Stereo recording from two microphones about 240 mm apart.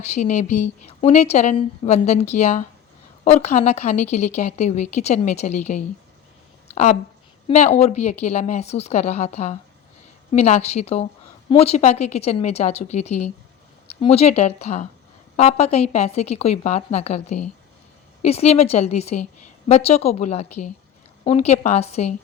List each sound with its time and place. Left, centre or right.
0.0 s a woman's voice: left
6.7 s a sound: left
7.4 s a woman's voice: left